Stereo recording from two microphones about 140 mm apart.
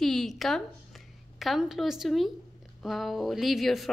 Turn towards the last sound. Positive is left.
turn(degrees=0)  # may be behind; listen again after turning